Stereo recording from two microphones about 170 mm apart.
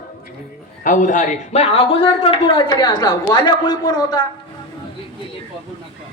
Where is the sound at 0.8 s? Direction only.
50° left (ahead or behind).